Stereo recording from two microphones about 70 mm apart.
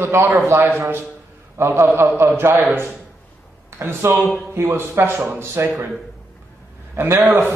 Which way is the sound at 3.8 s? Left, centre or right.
Right.